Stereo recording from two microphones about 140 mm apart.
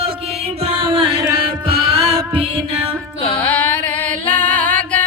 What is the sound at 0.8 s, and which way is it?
Music, 40° right (ahead or behind).